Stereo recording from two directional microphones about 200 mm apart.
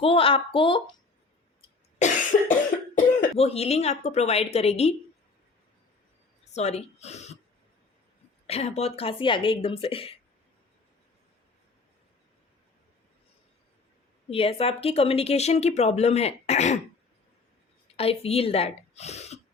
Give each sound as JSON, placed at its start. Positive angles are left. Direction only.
{"t": 0.0, "sound": "speech", "side_deg": 25}
{"t": 2.0, "sound": "cough", "side_deg": 40}
{"t": 3.3, "sound": "a woman's voice", "side_deg": 30}
{"t": 6.5, "sound": "a woman's voice", "side_deg": 35}
{"t": 8.4, "sound": "speech", "side_deg": 30}
{"t": 14.3, "sound": "a woman's voice", "side_deg": 30}
{"t": 17.9, "sound": "a woman's voice", "side_deg": 30}